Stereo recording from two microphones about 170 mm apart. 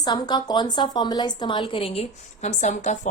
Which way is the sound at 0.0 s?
25° left (ahead or behind).